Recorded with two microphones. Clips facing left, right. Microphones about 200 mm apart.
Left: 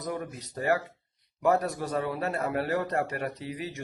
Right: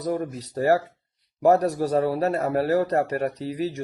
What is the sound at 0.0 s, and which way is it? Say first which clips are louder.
A man's voice: right 7 dB; 40° right (ahead or behind).